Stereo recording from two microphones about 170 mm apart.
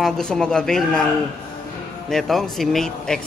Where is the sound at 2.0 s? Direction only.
Centre (ahead or behind).